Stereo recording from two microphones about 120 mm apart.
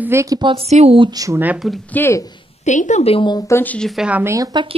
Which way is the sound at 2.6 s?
85° left.